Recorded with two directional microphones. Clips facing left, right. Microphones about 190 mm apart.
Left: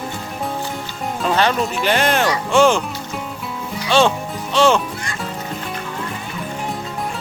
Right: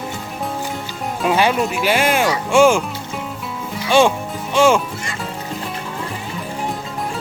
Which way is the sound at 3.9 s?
10° right (ahead or behind).